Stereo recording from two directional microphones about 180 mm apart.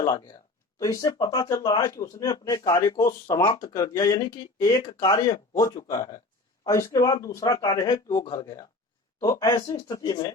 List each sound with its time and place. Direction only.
0.0 s a man's voice: 20° left (ahead or behind)